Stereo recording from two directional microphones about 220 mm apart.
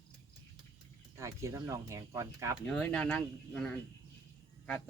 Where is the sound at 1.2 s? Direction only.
15° right (ahead or behind).